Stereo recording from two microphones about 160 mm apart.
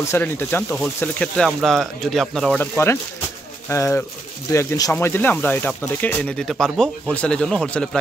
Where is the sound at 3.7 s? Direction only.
15° left (ahead or behind).